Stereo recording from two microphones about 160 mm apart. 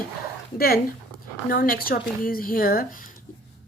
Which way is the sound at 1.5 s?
60° left (ahead or behind).